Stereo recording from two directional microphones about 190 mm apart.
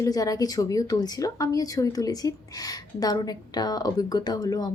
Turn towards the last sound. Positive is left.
turn(degrees=20)  # may be behind; listen again after turning